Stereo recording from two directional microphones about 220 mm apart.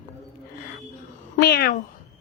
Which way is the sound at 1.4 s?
45° left (ahead or behind).